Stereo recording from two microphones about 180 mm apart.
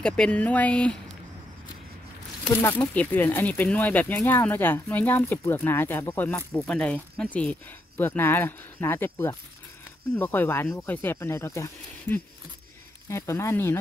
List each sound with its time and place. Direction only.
0.0 s speech: 5° left (ahead or behind)
2.4 s speech: 5° left (ahead or behind)